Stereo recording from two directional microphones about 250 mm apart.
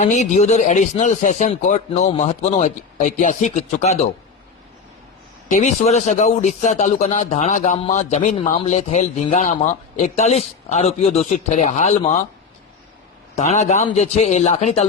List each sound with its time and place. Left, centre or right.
0.0 s a man's voice: left
5.5 s a man's voice: left
13.3 s a man's voice: left